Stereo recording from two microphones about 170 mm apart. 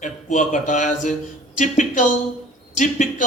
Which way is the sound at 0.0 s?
45° left (ahead or behind).